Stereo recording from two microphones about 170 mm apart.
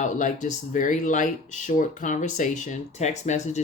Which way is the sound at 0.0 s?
50° left (ahead or behind).